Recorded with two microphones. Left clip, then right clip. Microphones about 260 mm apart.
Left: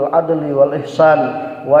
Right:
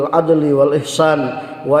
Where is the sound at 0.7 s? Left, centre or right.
Right.